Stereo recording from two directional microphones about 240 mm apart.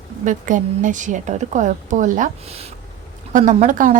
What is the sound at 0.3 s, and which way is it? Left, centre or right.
A woman's voice, right.